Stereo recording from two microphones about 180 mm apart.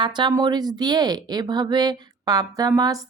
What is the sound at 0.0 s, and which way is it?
A woman's voice, 25° right (ahead or behind).